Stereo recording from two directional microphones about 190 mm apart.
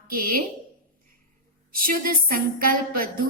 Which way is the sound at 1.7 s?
50° right (ahead or behind).